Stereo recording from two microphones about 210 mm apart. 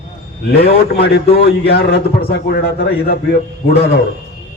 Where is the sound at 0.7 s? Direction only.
50° left (ahead or behind).